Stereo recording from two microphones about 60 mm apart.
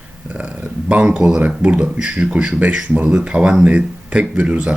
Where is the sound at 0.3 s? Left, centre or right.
Right.